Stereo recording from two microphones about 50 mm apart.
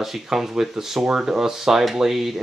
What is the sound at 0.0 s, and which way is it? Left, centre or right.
Speech, centre.